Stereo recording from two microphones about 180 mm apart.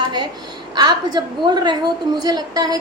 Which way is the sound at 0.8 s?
25° right (ahead or behind).